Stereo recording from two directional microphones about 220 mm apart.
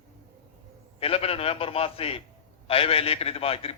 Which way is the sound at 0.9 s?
25° left (ahead or behind).